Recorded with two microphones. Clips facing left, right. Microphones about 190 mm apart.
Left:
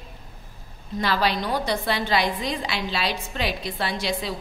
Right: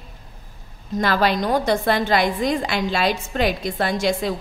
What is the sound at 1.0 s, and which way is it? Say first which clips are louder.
A woman's voice: right 4 dB; 50° right (ahead or behind).